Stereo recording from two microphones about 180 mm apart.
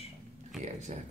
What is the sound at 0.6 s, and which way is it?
Speech, 40° right (ahead or behind).